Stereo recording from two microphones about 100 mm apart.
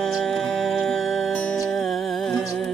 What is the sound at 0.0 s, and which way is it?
Music, centre (ahead or behind).